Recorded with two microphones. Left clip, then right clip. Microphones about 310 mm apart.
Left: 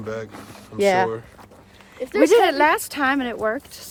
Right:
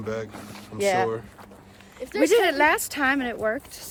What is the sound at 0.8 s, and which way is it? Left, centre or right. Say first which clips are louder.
Speech: left 5 dB; left.